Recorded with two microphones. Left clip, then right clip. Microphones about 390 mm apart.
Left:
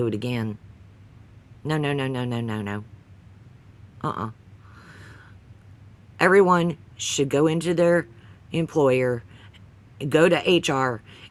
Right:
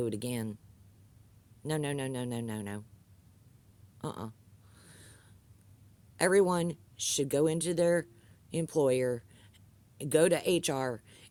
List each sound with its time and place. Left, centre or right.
0.0 s speech: right
1.6 s speech: right
4.0 s speech: right
4.7 s a sound: right
6.1 s speech: right